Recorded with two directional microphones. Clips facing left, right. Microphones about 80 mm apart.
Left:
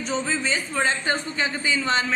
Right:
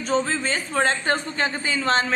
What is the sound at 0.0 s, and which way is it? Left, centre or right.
Speech, right.